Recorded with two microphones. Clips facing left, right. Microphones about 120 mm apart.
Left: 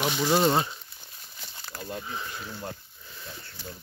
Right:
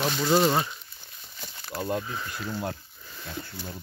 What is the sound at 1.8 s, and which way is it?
Speech, 70° right (ahead or behind).